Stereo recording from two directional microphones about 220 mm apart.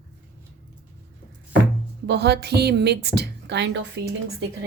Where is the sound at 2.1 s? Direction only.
50° right (ahead or behind).